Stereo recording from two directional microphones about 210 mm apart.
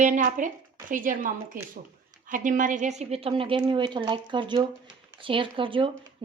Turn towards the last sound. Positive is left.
turn(degrees=-25)  # may be behind; listen again after turning